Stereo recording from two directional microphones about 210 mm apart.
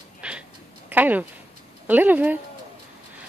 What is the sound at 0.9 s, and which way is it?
Speech, 10° right (ahead or behind).